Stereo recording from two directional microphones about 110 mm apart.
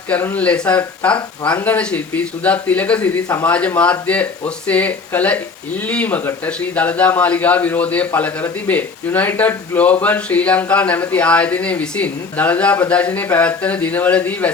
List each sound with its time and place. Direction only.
0.1 s speech: 15° left (ahead or behind)